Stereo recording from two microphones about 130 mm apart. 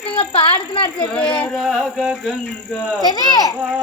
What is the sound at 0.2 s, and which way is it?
Speech, 45° left (ahead or behind).